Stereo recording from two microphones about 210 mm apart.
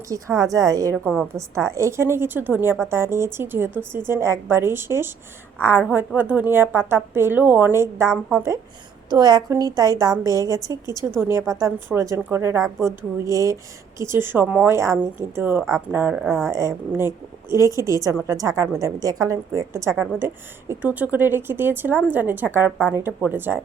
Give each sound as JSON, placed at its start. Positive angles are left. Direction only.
{"t": 0.4, "sound": "a woman's voice", "side_deg": -15}
{"t": 1.0, "sound": "speech", "side_deg": 0}
{"t": 1.7, "sound": "a woman's voice", "side_deg": -15}
{"t": 16.2, "sound": "speech", "side_deg": 5}
{"t": 16.5, "sound": "a woman's voice", "side_deg": -15}
{"t": 19.9, "sound": "speech", "side_deg": 5}
{"t": 20.1, "sound": "a woman's voice", "side_deg": -10}